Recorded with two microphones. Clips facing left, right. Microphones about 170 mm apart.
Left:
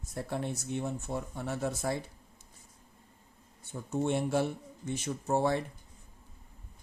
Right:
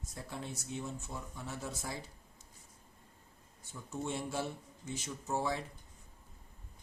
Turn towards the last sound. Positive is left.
turn(degrees=60)  # may be behind; listen again after turning